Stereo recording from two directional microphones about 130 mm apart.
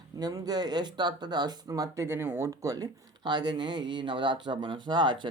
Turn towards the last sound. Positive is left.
turn(degrees=-35)  # may be behind; listen again after turning